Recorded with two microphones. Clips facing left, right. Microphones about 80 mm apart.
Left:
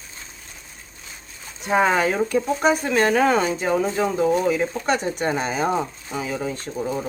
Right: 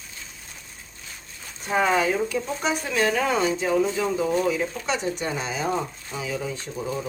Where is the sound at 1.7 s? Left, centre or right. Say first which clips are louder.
Left 3 dB; left.